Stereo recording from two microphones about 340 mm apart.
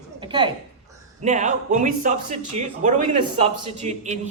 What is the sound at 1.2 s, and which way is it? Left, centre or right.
Speech, right.